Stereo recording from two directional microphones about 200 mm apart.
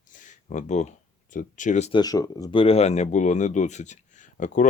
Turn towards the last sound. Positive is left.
turn(degrees=40)  # may be behind; listen again after turning